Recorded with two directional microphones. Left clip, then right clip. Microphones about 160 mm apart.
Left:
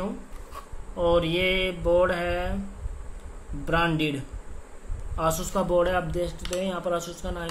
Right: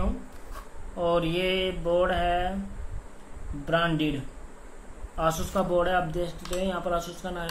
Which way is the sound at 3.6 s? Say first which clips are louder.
Left 1 dB; 35° left (ahead or behind).